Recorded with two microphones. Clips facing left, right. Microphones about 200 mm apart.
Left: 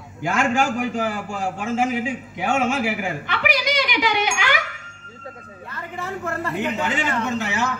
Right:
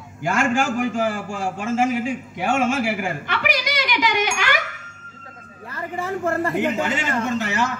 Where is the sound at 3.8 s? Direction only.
45° right (ahead or behind).